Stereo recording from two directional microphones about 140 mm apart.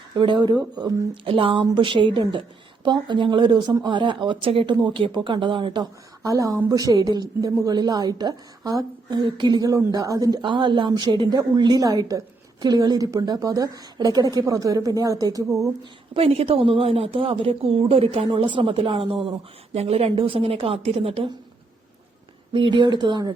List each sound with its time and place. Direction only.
0.1 s a woman's voice: 35° right (ahead or behind)
15.8 s a woman's voice: 40° right (ahead or behind)
22.5 s a woman's voice: 35° right (ahead or behind)